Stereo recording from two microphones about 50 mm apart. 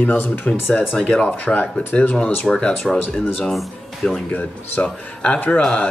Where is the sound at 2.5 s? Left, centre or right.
Centre.